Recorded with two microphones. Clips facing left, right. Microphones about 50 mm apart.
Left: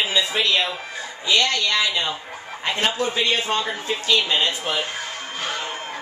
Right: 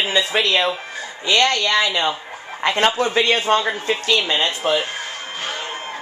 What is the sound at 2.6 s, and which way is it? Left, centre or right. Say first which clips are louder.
Speech: right 5 dB; right.